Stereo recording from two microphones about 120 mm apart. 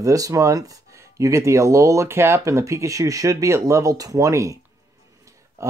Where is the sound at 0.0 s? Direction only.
30° right (ahead or behind).